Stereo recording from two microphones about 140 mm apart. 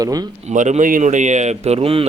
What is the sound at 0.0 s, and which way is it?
Speech, 25° right (ahead or behind).